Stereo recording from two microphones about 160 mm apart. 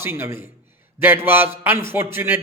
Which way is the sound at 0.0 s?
15° right (ahead or behind).